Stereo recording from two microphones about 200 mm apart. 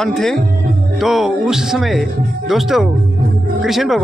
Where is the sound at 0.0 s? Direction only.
Centre (ahead or behind).